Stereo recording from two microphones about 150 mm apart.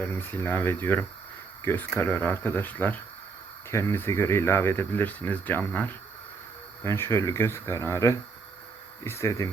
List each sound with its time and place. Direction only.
0.0 s speech: 15° left (ahead or behind)